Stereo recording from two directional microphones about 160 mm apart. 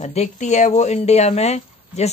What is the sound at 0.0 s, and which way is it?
Speech, 45° left (ahead or behind).